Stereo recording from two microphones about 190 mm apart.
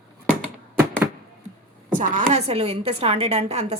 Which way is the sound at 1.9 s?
40° right (ahead or behind).